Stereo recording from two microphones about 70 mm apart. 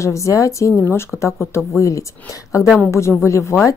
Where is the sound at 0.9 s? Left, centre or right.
Left.